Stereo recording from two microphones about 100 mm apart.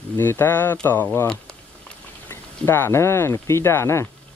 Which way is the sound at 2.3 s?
25° left (ahead or behind).